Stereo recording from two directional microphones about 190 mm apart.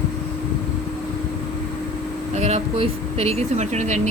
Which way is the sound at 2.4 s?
35° right (ahead or behind).